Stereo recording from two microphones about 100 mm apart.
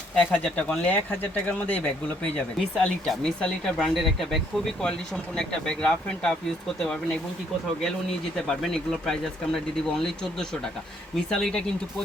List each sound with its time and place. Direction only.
0.2 s speech: 10° left (ahead or behind)
2.7 s speech: 5° left (ahead or behind)
8.4 s speech: 5° left (ahead or behind)